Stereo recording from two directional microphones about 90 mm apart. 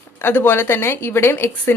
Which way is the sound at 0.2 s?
25° left (ahead or behind).